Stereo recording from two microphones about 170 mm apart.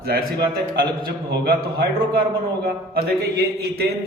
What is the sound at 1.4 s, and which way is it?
A man's voice, 65° right (ahead or behind).